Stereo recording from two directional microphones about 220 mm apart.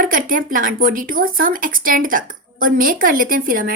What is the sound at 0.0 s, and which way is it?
A woman's voice, 40° right (ahead or behind).